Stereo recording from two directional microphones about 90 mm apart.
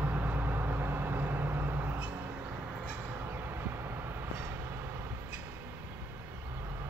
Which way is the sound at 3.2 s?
25° right (ahead or behind).